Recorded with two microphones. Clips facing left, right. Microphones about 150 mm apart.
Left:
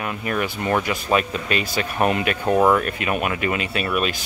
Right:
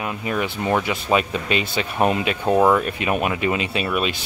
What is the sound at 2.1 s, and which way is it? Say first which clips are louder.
Speech: right 1 dB; 15° right (ahead or behind).